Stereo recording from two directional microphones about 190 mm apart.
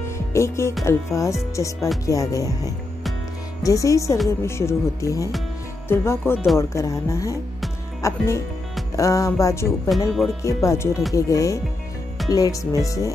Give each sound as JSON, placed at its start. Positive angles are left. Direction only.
{"t": 0.3, "sound": "speech", "side_deg": 15}
{"t": 6.3, "sound": "speech", "side_deg": 0}
{"t": 6.7, "sound": "speech", "side_deg": 15}